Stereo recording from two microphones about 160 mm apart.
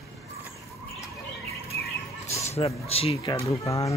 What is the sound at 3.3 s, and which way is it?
Speech, 20° left (ahead or behind).